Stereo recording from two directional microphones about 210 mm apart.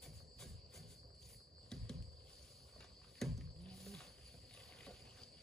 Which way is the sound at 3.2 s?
Centre (ahead or behind).